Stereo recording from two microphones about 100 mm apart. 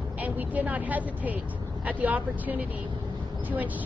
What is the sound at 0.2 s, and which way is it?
A woman's voice, 15° right (ahead or behind).